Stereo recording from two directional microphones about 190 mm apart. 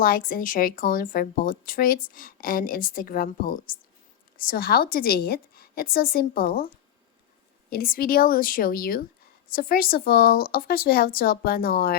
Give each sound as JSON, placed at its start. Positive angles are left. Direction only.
{"t": 0.0, "sound": "speech", "side_deg": 50}
{"t": 7.7, "sound": "speech", "side_deg": 50}